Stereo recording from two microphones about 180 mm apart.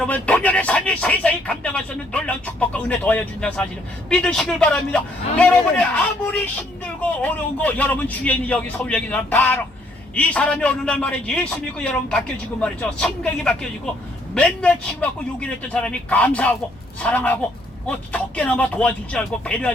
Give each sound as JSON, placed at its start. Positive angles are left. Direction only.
{"t": 0.0, "sound": "a man's voice", "side_deg": 10}